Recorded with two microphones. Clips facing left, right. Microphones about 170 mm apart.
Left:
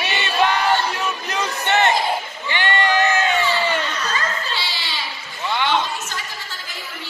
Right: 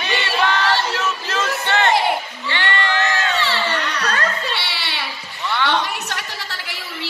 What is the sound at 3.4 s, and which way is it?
Baby cry, 70° right (ahead or behind).